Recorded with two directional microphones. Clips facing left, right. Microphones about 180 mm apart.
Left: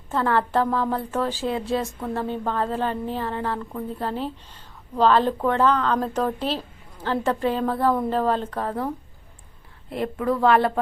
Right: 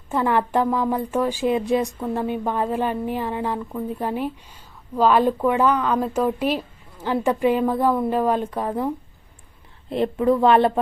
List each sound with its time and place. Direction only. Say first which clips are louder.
0.1 s a woman's voice: right 2 dB; 15° right (ahead or behind)
9.9 s speech: right 5 dB; 25° right (ahead or behind)